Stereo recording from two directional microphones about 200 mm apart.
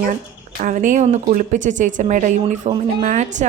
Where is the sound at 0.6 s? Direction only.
40° right (ahead or behind).